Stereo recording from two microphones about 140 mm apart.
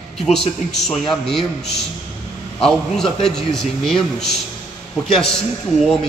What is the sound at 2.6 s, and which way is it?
A man's voice, 5° left (ahead or behind).